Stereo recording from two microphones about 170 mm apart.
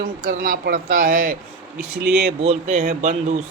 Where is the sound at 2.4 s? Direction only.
40° right (ahead or behind).